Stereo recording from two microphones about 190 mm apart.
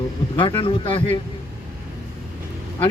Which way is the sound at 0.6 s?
25° left (ahead or behind).